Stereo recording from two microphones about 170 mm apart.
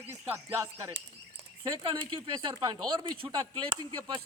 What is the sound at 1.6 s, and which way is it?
Speech, 30° right (ahead or behind).